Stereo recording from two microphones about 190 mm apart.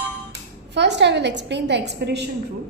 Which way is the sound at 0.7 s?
65° right (ahead or behind).